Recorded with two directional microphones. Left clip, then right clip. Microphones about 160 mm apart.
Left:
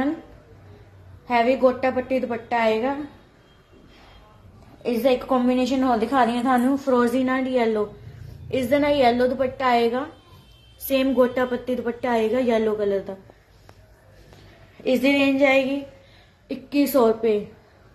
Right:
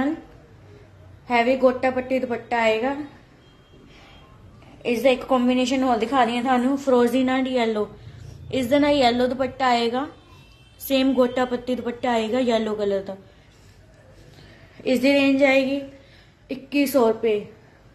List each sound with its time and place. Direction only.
1.2 s a woman's voice: centre (ahead or behind)
4.8 s a woman's voice: 10° right (ahead or behind)
14.8 s a woman's voice: centre (ahead or behind)